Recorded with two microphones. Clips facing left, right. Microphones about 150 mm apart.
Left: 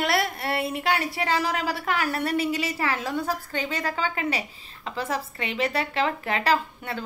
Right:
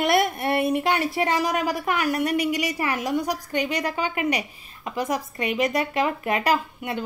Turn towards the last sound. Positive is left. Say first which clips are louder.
# right 2 dB
turn(degrees=-15)  # may be behind; listen again after turning